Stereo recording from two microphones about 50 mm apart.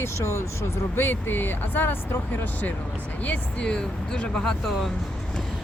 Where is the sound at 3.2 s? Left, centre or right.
Left.